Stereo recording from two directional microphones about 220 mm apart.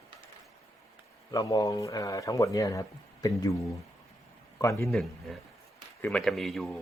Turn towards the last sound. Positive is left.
turn(degrees=0)  # may be behind; listen again after turning